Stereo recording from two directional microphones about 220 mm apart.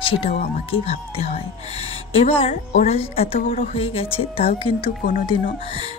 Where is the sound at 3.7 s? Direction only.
25° left (ahead or behind).